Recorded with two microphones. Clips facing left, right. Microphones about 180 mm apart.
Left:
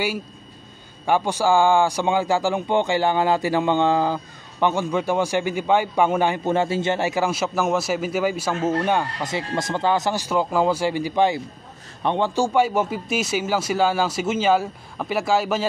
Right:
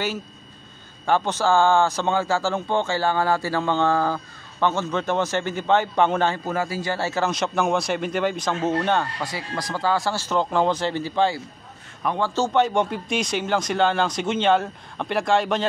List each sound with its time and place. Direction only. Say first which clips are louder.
1.0 s a man's voice: left 1 dB; 10° left (ahead or behind)
6.4 s a man's voice: left 5 dB; 25° left (ahead or behind); by 9.0 s 10° left (ahead or behind)
9.2 s a man's voice: left 4 dB; 25° left (ahead or behind)
12.4 s speech: right 1 dB; 10° left (ahead or behind)